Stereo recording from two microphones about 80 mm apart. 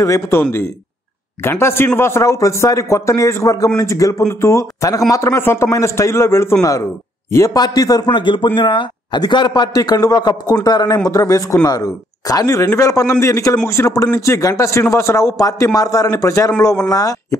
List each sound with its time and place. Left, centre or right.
0.0 s a man's voice: left
0.4 s a man's voice: left
7.5 s a man's voice: left
8.1 s a man's voice: left
11.1 s a man's voice: left